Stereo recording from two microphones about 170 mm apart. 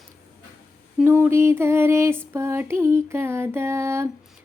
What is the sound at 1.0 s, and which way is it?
Child singing, 15° right (ahead or behind).